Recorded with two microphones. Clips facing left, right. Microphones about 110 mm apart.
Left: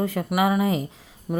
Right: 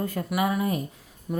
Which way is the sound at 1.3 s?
50° left (ahead or behind).